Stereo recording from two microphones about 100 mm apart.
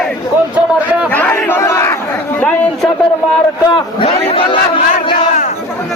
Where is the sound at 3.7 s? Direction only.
70° left (ahead or behind).